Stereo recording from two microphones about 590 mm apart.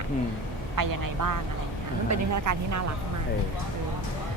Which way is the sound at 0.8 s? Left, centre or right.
Right.